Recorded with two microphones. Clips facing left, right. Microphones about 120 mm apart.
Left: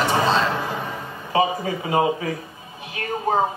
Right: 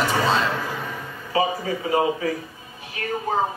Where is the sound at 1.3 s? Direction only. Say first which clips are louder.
Left 2 dB; 25° left (ahead or behind).